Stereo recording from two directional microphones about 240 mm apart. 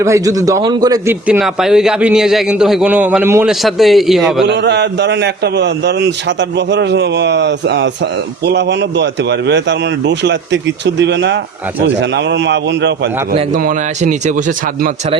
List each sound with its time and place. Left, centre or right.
0.0 s a man's voice: centre
1.3 s a man's voice: centre
4.4 s a man's voice: right
13.3 s speech: right